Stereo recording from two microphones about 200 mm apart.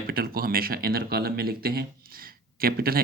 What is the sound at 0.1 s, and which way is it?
Speech, 50° right (ahead or behind).